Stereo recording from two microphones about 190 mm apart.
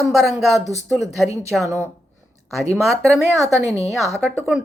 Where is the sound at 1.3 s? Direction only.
15° right (ahead or behind).